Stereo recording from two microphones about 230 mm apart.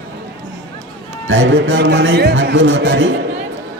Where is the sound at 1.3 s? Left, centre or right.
Right.